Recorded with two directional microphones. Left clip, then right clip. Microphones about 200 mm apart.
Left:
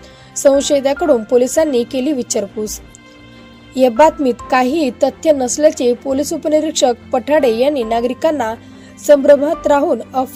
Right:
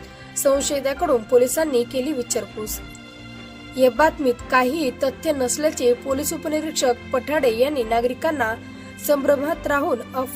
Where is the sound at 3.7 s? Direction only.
20° left (ahead or behind).